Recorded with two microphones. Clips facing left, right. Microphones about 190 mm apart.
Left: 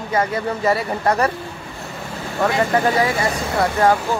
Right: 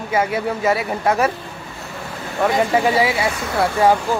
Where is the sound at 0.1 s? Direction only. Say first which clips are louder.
Right 1 dB; 10° right (ahead or behind).